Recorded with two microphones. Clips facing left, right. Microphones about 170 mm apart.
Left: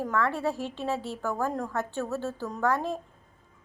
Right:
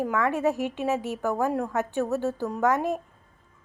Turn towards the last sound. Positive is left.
turn(degrees=-15)  # may be behind; listen again after turning